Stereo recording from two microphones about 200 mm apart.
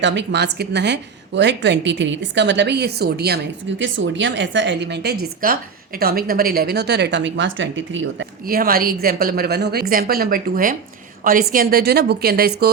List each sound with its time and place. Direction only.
0.0 s a woman's voice: 60° right (ahead or behind)
8.4 s a woman's voice: 45° right (ahead or behind)